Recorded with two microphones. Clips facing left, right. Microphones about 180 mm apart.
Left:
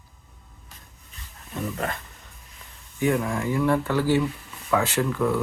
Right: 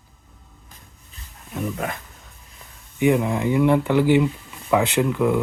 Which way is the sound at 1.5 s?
10° right (ahead or behind).